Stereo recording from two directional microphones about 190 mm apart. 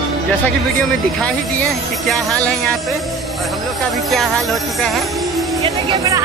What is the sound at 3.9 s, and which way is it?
Speech, centre (ahead or behind).